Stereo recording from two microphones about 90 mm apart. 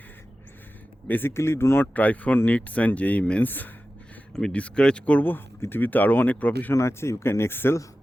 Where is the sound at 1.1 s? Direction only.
25° left (ahead or behind).